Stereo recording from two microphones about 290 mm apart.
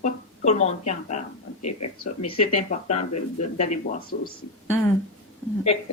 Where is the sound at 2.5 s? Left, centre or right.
Left.